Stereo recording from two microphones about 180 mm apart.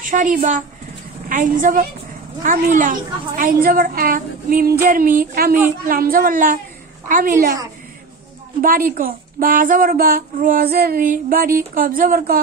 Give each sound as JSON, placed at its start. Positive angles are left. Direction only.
{"t": 0.0, "sound": "speech", "side_deg": -45}
{"t": 8.6, "sound": "speech", "side_deg": -50}